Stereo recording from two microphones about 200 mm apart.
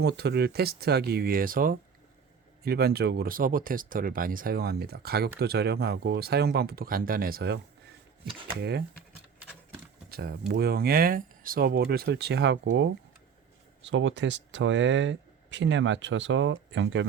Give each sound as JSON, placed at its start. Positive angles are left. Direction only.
{"t": 0.0, "sound": "speech", "side_deg": -55}
{"t": 10.1, "sound": "speech", "side_deg": -50}